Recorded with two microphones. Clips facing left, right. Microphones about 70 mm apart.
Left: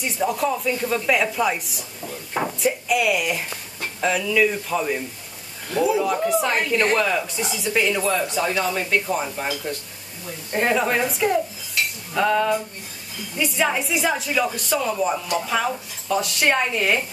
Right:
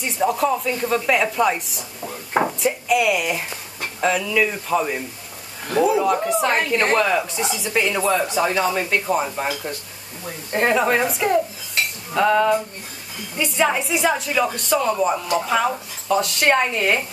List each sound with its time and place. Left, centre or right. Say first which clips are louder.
0.2 s speech: right 3 dB; centre
5.7 s speech: right 3 dB; right
6.0 s speech: right 2 dB; centre
10.5 s speech: right 2 dB; centre